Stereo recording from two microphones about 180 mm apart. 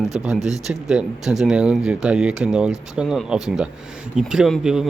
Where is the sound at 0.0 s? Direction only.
Centre (ahead or behind).